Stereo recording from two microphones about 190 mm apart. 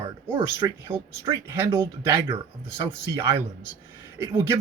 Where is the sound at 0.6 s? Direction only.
15° right (ahead or behind).